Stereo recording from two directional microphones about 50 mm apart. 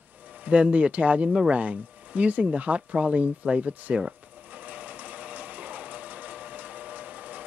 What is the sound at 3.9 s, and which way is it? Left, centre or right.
Sewing machine, right.